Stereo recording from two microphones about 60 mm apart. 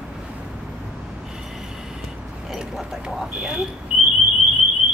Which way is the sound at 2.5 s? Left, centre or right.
Centre.